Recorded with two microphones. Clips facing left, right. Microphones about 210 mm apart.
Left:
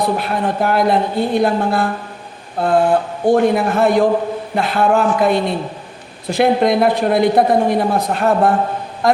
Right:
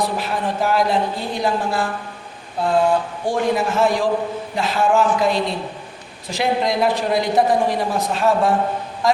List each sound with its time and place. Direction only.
0.2 s speech: 60° left (ahead or behind)